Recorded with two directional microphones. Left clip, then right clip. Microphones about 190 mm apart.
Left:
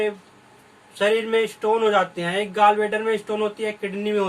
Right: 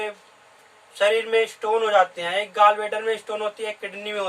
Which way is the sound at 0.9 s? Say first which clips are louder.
Even; 10° right (ahead or behind).